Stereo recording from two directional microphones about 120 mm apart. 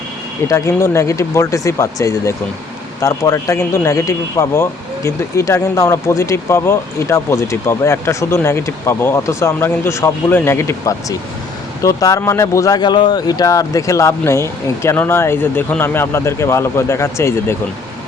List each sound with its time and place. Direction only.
0.4 s speech: 25° left (ahead or behind)